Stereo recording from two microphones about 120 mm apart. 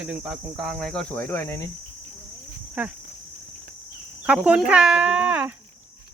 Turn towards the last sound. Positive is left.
turn(degrees=-15)  # may be behind; listen again after turning